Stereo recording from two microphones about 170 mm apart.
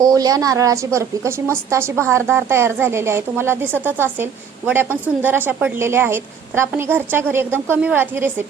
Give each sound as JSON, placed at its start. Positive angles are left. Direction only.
{"t": 0.0, "sound": "a woman's voice", "side_deg": -20}